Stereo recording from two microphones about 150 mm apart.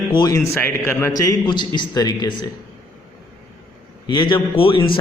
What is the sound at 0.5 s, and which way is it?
A man's voice, 15° left (ahead or behind).